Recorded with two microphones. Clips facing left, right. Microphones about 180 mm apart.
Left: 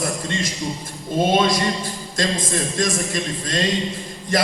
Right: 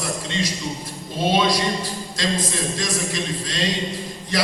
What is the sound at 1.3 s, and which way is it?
A man's voice, 50° left (ahead or behind).